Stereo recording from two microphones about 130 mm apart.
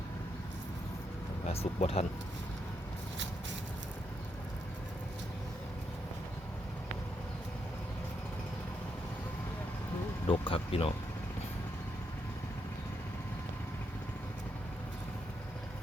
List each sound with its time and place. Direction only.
1.5 s speech: 55° left (ahead or behind)
10.2 s speech: 40° left (ahead or behind)